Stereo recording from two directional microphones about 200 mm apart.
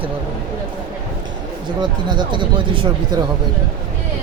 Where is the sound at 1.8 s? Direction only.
20° right (ahead or behind).